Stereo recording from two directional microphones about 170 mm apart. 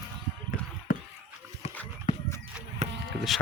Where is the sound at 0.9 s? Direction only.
55° left (ahead or behind).